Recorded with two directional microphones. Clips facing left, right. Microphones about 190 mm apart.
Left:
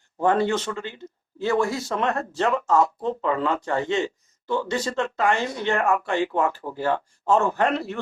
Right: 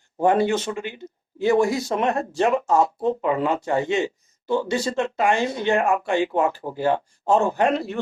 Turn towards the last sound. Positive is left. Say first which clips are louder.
# right 2 dB
turn(degrees=-15)  # may be behind; listen again after turning